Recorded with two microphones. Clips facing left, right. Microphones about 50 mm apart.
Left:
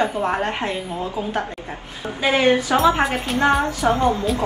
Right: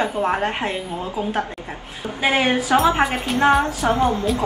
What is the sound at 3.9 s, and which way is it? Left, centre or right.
Speech, centre.